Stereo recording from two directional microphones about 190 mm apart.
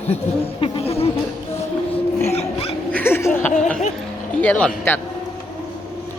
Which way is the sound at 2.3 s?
30° left (ahead or behind).